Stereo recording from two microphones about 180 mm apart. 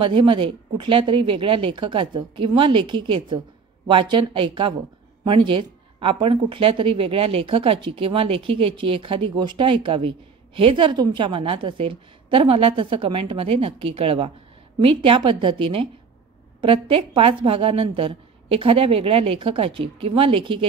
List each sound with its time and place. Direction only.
0.0 s a woman's voice: 25° right (ahead or behind)